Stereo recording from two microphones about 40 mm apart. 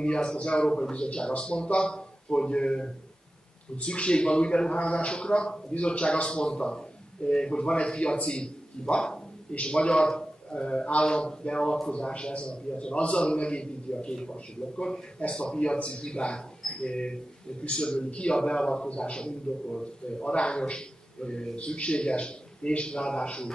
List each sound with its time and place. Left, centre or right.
0.0 s a man's voice: left